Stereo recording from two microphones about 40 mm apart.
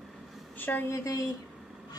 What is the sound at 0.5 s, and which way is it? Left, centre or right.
Speech, left.